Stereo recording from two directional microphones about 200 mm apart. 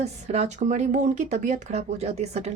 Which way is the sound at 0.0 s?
35° right (ahead or behind).